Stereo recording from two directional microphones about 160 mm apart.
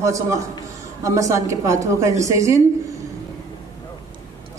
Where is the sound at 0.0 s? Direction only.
20° right (ahead or behind).